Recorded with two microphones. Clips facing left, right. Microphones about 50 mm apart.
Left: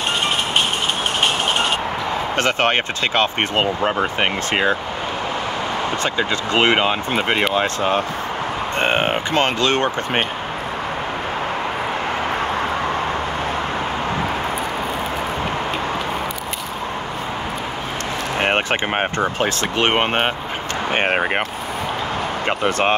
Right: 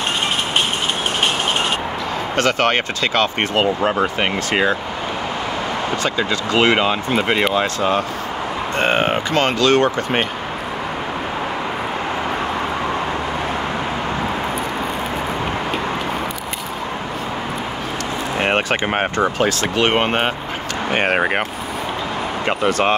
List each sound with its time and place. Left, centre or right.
2.3 s speech: left
6.0 s speech: left
18.4 s a sound: left
19.4 s speech: left
22.7 s speech: left